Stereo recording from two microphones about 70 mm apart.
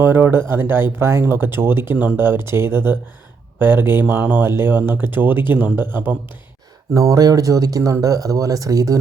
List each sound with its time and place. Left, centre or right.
0.0 s speech: right
6.9 s speech: right